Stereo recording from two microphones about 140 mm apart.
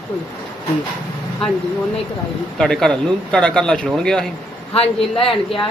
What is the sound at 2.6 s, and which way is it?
Speech, 5° left (ahead or behind).